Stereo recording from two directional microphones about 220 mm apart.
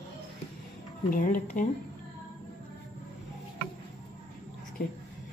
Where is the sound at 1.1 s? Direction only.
35° left (ahead or behind).